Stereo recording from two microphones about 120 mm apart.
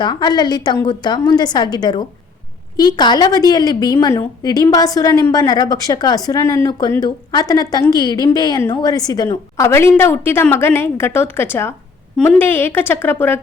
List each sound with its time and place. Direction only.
0.0 s a woman's voice: 35° left (ahead or behind)
9.6 s a woman's voice: 20° left (ahead or behind)
12.1 s a woman's voice: 5° left (ahead or behind)
12.4 s a woman's voice: 20° left (ahead or behind)